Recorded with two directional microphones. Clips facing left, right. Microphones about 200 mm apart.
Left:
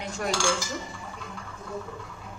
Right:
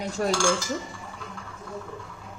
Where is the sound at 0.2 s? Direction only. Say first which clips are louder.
Right 4 dB; 35° right (ahead or behind).